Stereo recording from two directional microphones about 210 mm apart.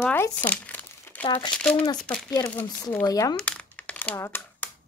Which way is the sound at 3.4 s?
5° left (ahead or behind).